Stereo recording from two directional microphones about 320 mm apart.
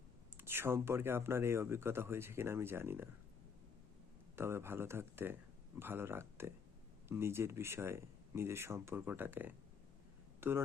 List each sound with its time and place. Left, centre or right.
0.3 s speech: centre
4.4 s speech: centre